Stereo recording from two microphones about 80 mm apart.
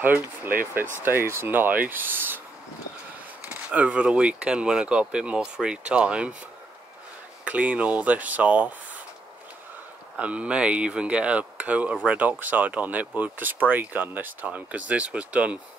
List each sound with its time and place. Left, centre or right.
0.0 s speech: right
3.7 s speech: centre
7.4 s speech: centre
10.1 s speech: centre